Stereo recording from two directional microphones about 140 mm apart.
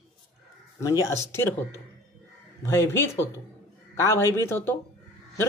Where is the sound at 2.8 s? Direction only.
15° left (ahead or behind).